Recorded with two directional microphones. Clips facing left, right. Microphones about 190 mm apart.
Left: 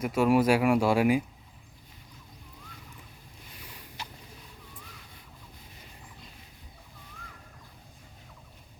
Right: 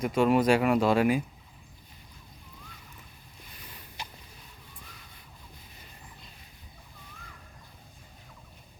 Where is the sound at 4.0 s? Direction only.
15° right (ahead or behind).